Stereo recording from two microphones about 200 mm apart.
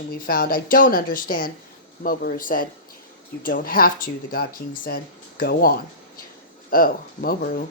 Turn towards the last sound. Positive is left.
turn(degrees=45)  # may be behind; listen again after turning